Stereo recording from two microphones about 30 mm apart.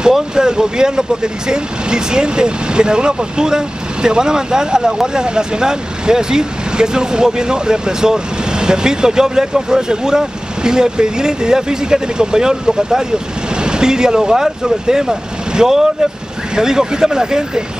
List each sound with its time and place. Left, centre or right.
0.4 s speech: right